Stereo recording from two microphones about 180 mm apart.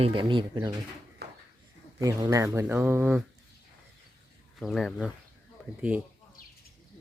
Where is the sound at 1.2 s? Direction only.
65° right (ahead or behind).